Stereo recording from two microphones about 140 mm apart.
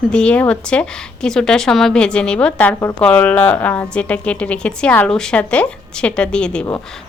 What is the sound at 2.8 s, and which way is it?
Speech, 20° left (ahead or behind).